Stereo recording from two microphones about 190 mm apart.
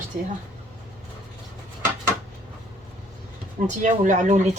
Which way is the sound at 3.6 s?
40° right (ahead or behind).